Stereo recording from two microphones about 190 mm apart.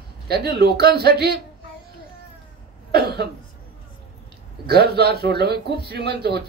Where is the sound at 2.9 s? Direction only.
60° right (ahead or behind).